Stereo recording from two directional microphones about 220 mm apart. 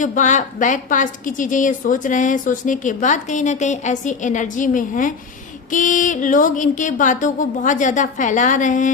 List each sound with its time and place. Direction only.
0.0 s a woman's voice: 35° left (ahead or behind)